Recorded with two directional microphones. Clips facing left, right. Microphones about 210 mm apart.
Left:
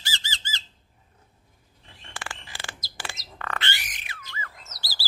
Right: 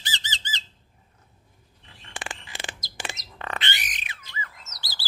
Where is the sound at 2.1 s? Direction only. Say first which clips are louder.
Right 2 dB; 20° right (ahead or behind).